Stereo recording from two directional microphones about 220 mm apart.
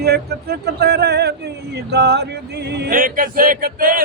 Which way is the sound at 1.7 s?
50° right (ahead or behind).